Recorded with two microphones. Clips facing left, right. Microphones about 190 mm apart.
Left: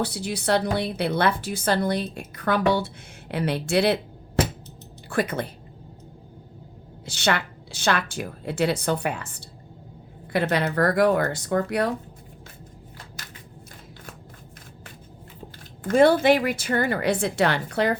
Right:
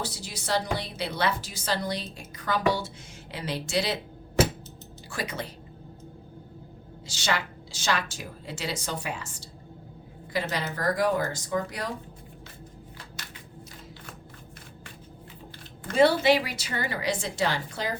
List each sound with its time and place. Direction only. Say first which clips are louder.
0.0 s a woman's voice: left 9 dB; 60° left (ahead or behind)
5.0 s a woman's voice: left 9 dB; 55° left (ahead or behind)
7.0 s a woman's voice: left 5 dB; 60° left (ahead or behind)
10.5 s a woman's voice: left 8 dB; 60° left (ahead or behind)
15.8 s a woman's voice: left 4 dB; 50° left (ahead or behind)